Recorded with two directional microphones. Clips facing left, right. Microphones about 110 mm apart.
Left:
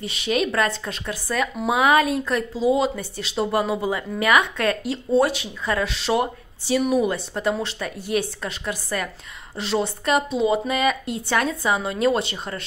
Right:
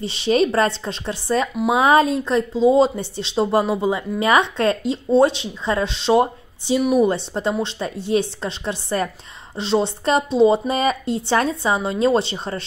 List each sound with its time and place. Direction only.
0.0 s speech: 30° right (ahead or behind)